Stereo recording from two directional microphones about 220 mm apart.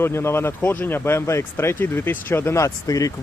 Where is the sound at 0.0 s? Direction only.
10° left (ahead or behind).